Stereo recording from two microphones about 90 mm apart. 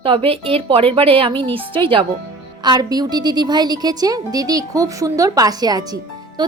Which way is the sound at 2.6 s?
50° right (ahead or behind).